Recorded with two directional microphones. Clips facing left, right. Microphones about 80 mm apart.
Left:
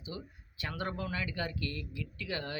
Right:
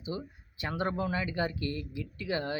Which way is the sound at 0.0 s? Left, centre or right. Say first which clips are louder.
Right 6 dB; right.